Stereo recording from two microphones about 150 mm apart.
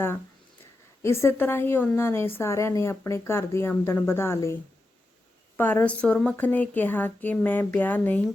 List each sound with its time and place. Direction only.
0.6 s a woman's voice: 15° left (ahead or behind)
5.5 s a woman's voice: 10° left (ahead or behind)